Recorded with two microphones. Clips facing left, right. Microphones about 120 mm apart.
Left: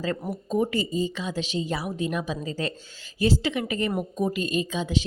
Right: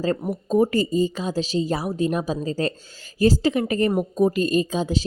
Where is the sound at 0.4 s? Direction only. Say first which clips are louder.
Right 6 dB; 40° right (ahead or behind).